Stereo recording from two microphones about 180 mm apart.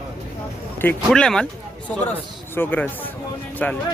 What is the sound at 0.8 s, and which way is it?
Speech, 5° left (ahead or behind).